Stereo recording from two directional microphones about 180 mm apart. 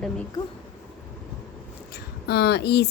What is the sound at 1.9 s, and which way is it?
Speech, 65° left (ahead or behind).